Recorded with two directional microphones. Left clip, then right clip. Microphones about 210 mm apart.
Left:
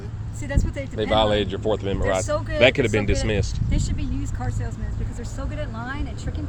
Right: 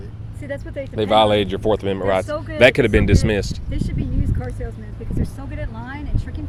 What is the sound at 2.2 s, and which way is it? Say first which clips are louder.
Speech: left 1 dB; 50° left (ahead or behind).